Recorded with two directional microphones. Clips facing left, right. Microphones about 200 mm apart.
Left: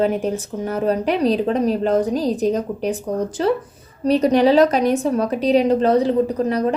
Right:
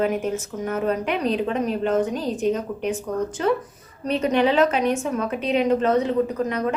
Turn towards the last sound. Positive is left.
turn(degrees=35)  # may be behind; listen again after turning